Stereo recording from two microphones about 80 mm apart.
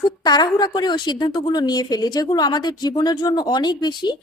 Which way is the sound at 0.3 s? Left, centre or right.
Left.